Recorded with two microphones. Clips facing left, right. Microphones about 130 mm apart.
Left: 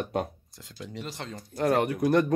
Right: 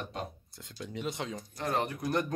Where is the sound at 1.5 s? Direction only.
55° left (ahead or behind); by 2.3 s 70° left (ahead or behind).